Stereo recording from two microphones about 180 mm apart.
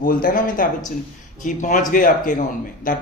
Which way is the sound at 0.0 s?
50° left (ahead or behind).